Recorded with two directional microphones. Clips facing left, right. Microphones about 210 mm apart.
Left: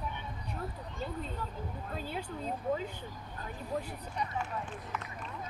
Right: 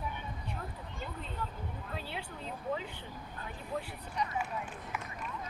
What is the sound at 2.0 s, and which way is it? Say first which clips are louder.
Speech: left 5 dB; 45° left (ahead or behind).